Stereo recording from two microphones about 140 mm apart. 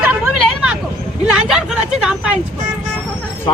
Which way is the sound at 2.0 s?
5° right (ahead or behind).